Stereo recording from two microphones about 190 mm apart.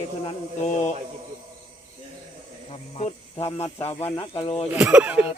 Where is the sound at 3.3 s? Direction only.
30° left (ahead or behind).